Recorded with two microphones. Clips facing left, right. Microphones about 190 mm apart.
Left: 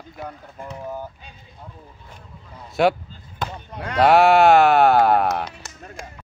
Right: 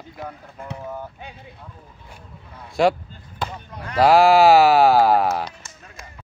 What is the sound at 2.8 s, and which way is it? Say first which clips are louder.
Speech: even; centre (ahead or behind).